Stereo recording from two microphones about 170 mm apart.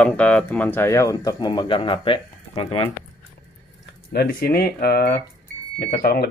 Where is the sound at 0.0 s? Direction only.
10° left (ahead or behind); by 2.9 s 35° left (ahead or behind).